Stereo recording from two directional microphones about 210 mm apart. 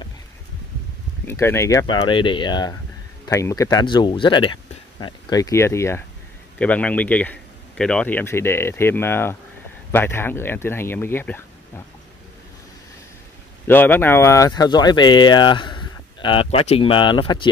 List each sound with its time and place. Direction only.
1.2 s speech: 10° left (ahead or behind)
13.7 s speech: 10° left (ahead or behind)